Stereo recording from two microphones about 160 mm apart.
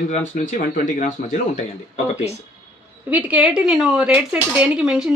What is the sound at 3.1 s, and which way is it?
Speech, 10° right (ahead or behind).